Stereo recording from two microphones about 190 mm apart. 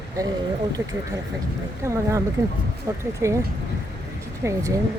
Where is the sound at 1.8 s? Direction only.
15° right (ahead or behind).